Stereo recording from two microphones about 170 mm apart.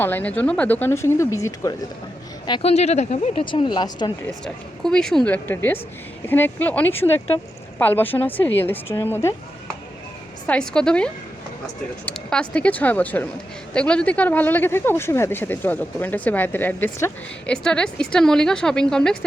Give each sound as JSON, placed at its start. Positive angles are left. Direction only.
{"t": 0.0, "sound": "speech", "side_deg": 10}
{"t": 2.5, "sound": "speech", "side_deg": 35}
{"t": 3.4, "sound": "speech", "side_deg": 30}
{"t": 4.4, "sound": "speech", "side_deg": 5}
{"t": 10.4, "sound": "speech", "side_deg": 5}